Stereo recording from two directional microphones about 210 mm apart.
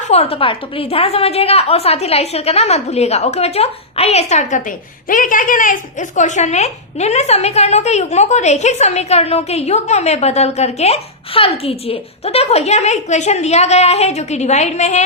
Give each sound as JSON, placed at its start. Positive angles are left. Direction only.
{"t": 0.1, "sound": "a woman's voice", "side_deg": 30}